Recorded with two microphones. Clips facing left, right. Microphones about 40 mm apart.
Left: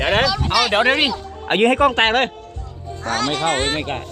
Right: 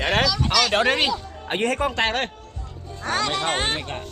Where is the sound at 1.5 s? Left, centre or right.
Left.